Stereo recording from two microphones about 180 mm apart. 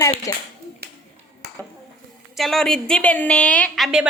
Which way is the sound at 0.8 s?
65° right (ahead or behind).